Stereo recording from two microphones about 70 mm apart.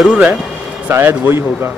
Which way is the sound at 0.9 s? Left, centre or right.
Right.